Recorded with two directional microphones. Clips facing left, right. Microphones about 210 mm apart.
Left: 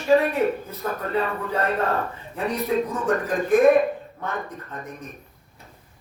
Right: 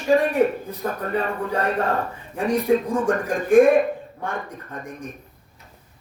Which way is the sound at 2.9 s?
10° right (ahead or behind).